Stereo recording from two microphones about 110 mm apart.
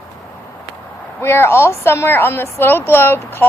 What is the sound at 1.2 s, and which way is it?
Speech, 20° left (ahead or behind).